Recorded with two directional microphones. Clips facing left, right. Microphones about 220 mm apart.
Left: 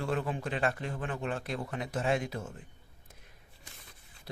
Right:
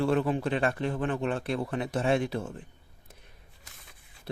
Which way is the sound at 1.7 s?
30° right (ahead or behind).